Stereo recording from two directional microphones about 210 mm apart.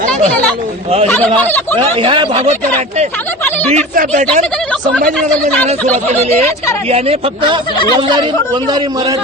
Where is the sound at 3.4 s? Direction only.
10° left (ahead or behind).